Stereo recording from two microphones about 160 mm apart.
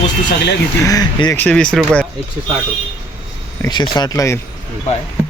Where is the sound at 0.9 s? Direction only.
20° left (ahead or behind).